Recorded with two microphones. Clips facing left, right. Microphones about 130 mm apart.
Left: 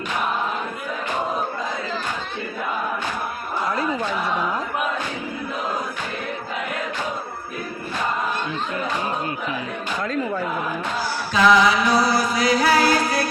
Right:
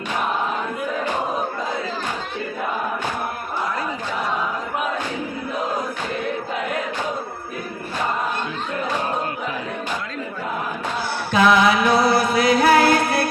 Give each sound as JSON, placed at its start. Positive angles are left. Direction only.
{"t": 11.3, "sound": "music", "side_deg": -55}